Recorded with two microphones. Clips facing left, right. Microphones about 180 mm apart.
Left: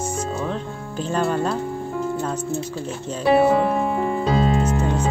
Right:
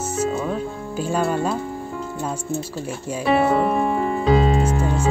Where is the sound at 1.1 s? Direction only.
5° right (ahead or behind).